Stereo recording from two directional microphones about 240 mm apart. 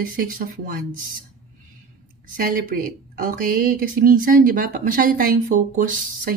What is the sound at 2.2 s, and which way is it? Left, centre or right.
Speech, right.